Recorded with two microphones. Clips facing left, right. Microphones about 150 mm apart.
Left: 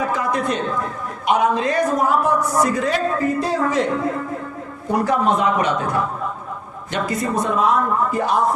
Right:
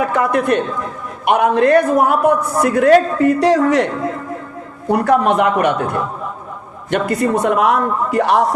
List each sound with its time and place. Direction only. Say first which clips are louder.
0.1 s a man's voice: right 6 dB; 60° right (ahead or behind)
4.9 s a man's voice: right 4 dB; 65° right (ahead or behind)